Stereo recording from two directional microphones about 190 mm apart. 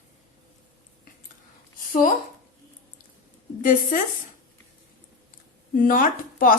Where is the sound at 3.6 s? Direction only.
45° left (ahead or behind).